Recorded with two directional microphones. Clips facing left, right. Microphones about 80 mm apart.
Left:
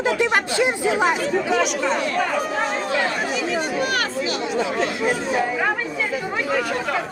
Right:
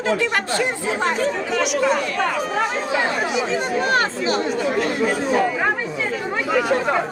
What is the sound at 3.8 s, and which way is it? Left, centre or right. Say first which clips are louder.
Speech: right 3 dB; right.